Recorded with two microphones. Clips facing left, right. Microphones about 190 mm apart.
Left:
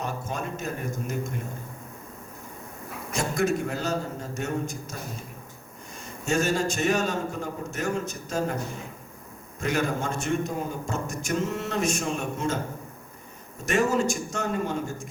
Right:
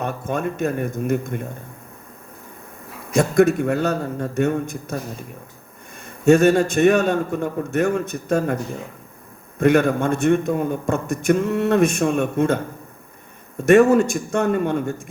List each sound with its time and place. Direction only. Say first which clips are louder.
0.0 s a man's voice: right 8 dB; 60° right (ahead or behind)
3.1 s a man's voice: right 10 dB; 60° right (ahead or behind)
6.1 s a man's voice: right 12 dB; 60° right (ahead or behind)
9.6 s a man's voice: right 11 dB; 60° right (ahead or behind)
13.7 s a man's voice: right 11 dB; 60° right (ahead or behind)